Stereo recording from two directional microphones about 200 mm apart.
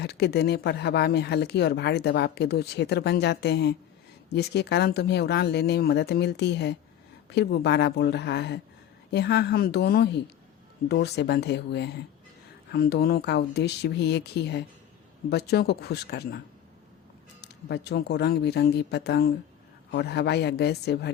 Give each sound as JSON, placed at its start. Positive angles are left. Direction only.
{"t": 0.0, "sound": "speech", "side_deg": 55}
{"t": 17.4, "sound": "speech", "side_deg": 55}